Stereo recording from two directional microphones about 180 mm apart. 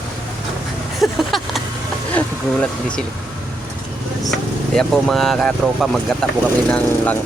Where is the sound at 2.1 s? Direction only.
5° left (ahead or behind).